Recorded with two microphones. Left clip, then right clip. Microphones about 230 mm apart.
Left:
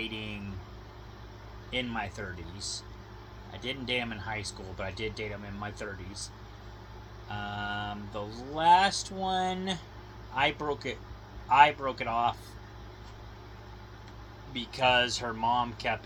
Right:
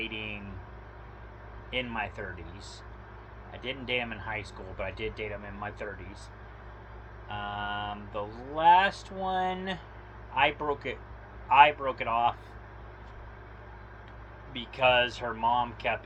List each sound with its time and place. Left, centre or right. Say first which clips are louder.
0.0 s vehicle: right 2 dB; left
1.7 s speech: right 1 dB; left
3.5 s speech: even; left
7.3 s speech: right 1 dB; left
14.8 s speech: right 1 dB; left